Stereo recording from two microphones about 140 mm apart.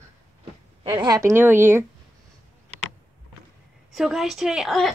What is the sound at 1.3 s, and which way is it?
Speech, 15° right (ahead or behind).